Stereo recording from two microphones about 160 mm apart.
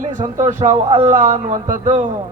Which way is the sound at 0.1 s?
50° right (ahead or behind).